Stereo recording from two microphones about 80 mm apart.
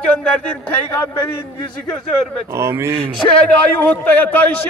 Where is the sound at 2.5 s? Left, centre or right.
Right.